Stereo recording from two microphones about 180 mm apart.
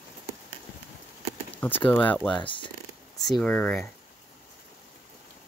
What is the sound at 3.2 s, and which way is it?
Speech, centre (ahead or behind).